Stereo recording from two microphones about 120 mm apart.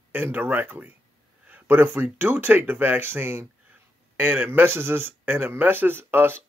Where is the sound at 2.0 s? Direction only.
15° right (ahead or behind).